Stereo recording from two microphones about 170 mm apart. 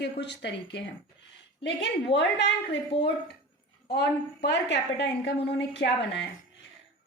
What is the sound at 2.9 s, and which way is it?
Speech, 35° left (ahead or behind).